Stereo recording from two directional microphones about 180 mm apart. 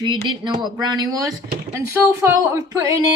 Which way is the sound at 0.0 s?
25° right (ahead or behind).